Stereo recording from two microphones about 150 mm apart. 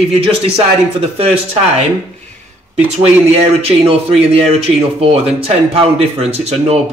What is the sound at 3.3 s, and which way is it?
Speech, 40° right (ahead or behind).